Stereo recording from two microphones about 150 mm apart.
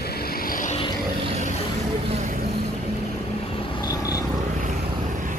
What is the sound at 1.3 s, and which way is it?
Vehicle, 50° right (ahead or behind).